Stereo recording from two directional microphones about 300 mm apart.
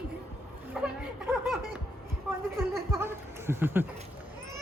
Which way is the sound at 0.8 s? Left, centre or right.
Centre.